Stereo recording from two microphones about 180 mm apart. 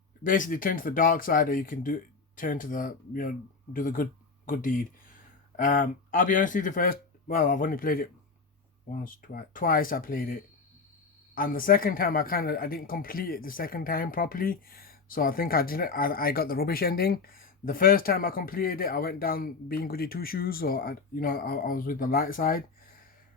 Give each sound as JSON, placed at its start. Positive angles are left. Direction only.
{"t": 0.3, "sound": "speech", "side_deg": 50}
{"t": 11.3, "sound": "speech", "side_deg": 50}